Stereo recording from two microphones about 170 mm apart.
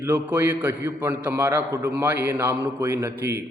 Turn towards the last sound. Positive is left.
turn(degrees=-15)  # may be behind; listen again after turning